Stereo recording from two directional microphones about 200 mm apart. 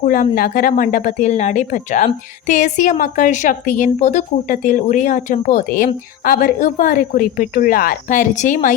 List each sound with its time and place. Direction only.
0.0 s a woman's voice: 45° left (ahead or behind)